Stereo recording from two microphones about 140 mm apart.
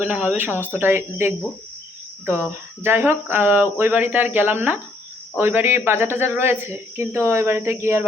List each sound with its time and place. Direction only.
0.0 s speech: 10° right (ahead or behind)